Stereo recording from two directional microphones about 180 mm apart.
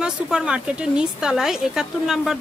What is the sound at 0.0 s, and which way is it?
Speech, 5° right (ahead or behind).